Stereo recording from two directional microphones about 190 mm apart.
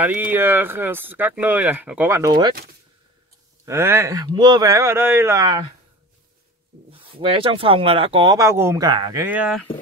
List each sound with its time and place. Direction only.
0.0 s speech: 10° right (ahead or behind)
3.6 s speech: 15° right (ahead or behind)
6.9 s speech: 30° right (ahead or behind)
9.2 s speech: 5° right (ahead or behind)